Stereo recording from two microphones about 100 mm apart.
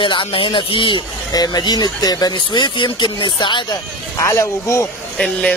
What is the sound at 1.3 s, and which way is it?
Speech, 40° left (ahead or behind).